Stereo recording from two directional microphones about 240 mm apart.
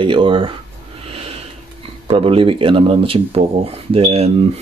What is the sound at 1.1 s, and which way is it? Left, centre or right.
Sniff, right.